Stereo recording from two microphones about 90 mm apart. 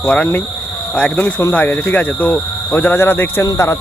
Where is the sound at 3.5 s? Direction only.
35° left (ahead or behind).